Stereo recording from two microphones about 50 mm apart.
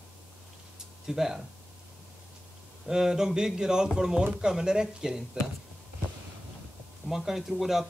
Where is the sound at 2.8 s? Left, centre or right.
Centre.